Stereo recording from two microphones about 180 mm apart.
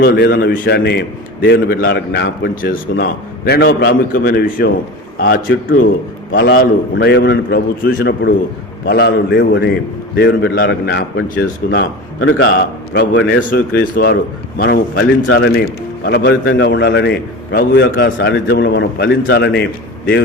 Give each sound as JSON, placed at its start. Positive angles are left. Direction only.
{"t": 0.0, "sound": "a man's voice", "side_deg": 60}
{"t": 6.3, "sound": "a man's voice", "side_deg": 65}
{"t": 11.7, "sound": "a man's voice", "side_deg": 80}
{"t": 12.9, "sound": "a man's voice", "side_deg": 60}
{"t": 13.5, "sound": "a man's voice", "side_deg": 55}